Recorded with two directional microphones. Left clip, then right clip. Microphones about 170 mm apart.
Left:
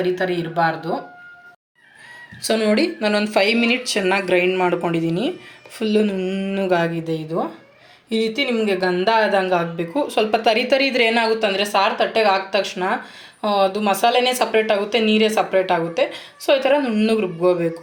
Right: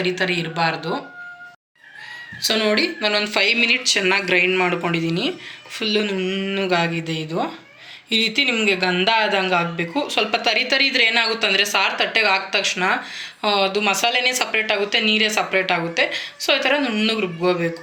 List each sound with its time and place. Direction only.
0.0 s speech: 40° left (ahead or behind)
2.4 s speech: 65° left (ahead or behind)